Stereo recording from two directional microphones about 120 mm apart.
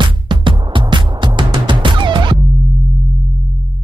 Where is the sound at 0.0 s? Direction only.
40° right (ahead or behind).